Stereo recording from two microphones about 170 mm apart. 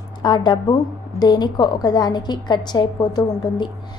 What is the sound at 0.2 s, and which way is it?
A woman's voice, 25° left (ahead or behind).